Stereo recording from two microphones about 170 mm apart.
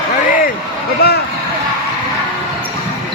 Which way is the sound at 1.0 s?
65° left (ahead or behind).